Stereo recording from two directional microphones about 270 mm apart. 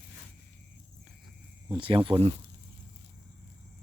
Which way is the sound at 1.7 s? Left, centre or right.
Centre.